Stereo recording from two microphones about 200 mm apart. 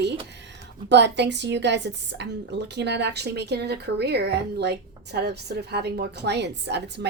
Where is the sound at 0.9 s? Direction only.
60° right (ahead or behind).